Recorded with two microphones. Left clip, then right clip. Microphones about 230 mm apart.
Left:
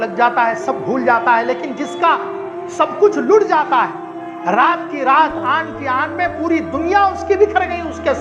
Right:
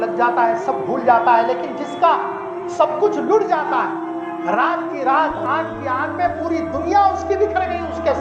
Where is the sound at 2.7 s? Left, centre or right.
Left.